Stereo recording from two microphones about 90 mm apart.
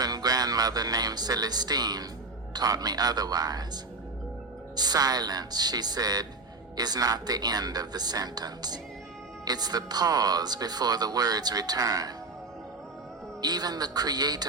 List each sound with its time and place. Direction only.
0.0 s speech: 45° right (ahead or behind)
4.8 s speech: 50° right (ahead or behind)
13.4 s speech: 50° right (ahead or behind)